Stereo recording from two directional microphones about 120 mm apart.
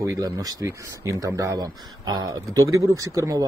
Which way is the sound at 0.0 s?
30° right (ahead or behind).